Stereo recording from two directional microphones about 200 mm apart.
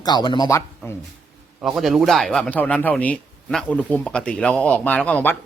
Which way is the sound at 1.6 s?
Centre (ahead or behind).